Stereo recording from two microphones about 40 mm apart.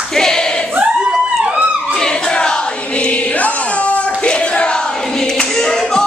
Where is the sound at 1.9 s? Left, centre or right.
Left.